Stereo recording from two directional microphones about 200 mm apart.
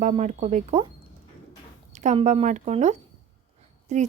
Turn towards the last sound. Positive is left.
turn(degrees=-35)  # may be behind; listen again after turning